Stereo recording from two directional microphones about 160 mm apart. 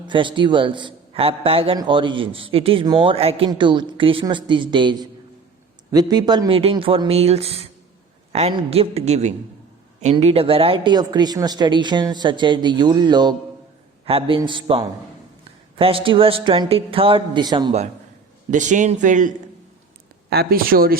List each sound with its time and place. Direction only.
0.0 s a man's voice: 30° right (ahead or behind)
18.5 s a man's voice: 50° right (ahead or behind)
20.3 s speech: 75° right (ahead or behind)